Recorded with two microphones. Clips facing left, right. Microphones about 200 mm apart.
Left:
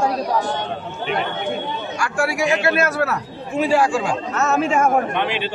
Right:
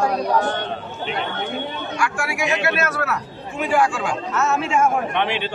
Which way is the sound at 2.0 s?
35° left (ahead or behind).